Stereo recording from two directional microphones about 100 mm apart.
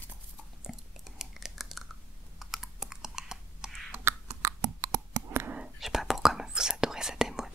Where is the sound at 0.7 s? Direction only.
Centre (ahead or behind).